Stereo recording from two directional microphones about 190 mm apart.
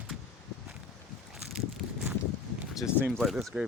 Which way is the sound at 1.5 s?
5° right (ahead or behind).